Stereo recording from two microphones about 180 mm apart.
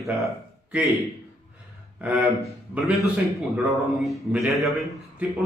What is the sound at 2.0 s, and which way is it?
A man's voice, 10° right (ahead or behind).